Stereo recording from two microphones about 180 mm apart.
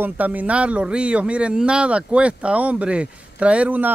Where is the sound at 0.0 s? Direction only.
10° right (ahead or behind).